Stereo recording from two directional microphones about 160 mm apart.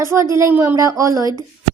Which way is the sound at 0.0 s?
15° right (ahead or behind).